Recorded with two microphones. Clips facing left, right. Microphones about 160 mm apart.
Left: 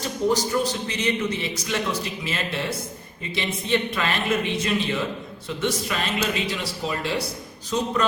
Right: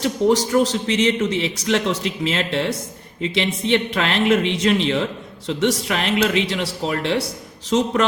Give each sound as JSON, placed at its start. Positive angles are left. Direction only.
{"t": 0.0, "sound": "a man's voice", "side_deg": -75}
{"t": 7.7, "sound": "a man's voice", "side_deg": -80}